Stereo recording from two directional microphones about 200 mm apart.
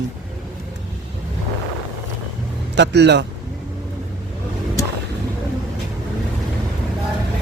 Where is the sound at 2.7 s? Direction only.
60° right (ahead or behind).